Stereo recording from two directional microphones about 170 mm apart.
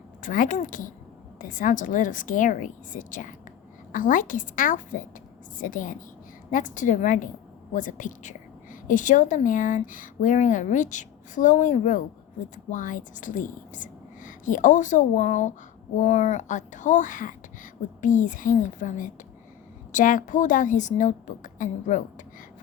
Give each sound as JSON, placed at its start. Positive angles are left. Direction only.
{"t": 0.2, "sound": "a woman's voice", "side_deg": 50}